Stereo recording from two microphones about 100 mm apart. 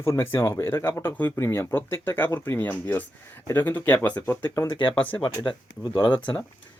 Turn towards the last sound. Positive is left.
turn(degrees=50)  # may be behind; listen again after turning